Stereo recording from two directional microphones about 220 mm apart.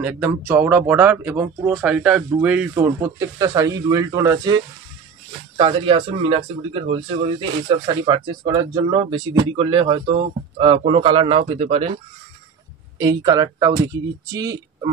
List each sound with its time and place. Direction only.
0.5 s speech: 10° right (ahead or behind)
5.6 s speech: 25° right (ahead or behind)
13.0 s speech: 20° right (ahead or behind)